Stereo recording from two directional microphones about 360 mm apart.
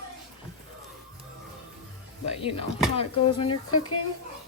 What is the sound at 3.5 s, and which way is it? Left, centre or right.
Speech, left.